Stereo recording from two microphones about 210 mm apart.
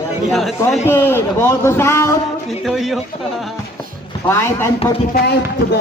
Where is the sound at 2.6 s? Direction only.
Centre (ahead or behind).